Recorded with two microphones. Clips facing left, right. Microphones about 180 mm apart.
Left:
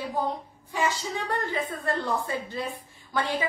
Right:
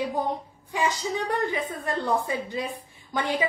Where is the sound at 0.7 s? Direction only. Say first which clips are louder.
Right 2 dB; 15° right (ahead or behind).